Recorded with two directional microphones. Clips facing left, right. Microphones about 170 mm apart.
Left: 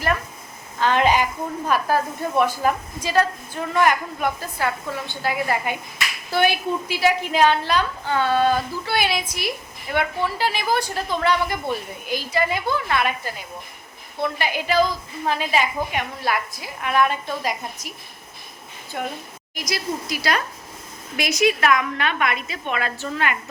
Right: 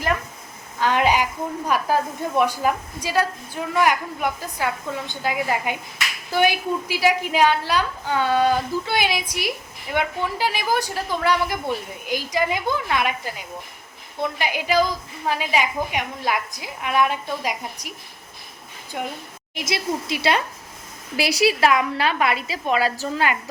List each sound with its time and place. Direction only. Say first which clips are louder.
0.8 s a woman's voice: left 1 dB; 10° right (ahead or behind)
18.9 s a woman's voice: left 1 dB; 5° right (ahead or behind)
19.5 s a woman's voice: right 2 dB; 25° right (ahead or behind)